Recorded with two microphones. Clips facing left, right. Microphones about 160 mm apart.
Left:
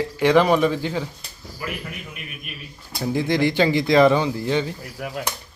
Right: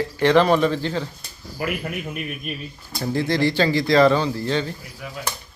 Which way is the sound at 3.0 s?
15° left (ahead or behind).